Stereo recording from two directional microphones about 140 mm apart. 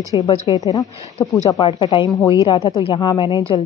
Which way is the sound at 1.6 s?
35° left (ahead or behind).